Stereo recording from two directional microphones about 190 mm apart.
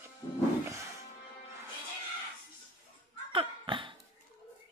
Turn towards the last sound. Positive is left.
turn(degrees=-25)  # may be behind; listen again after turning